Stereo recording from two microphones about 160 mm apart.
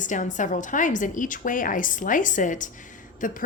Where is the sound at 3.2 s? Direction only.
60° left (ahead or behind).